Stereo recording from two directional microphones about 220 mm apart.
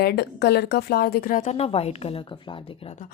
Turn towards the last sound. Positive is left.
turn(degrees=25)  # may be behind; listen again after turning